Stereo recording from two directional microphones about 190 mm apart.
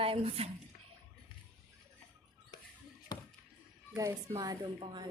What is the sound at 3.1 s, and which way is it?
Basketball bounce, 20° left (ahead or behind).